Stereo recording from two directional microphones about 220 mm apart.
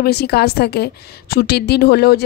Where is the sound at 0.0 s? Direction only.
45° left (ahead or behind).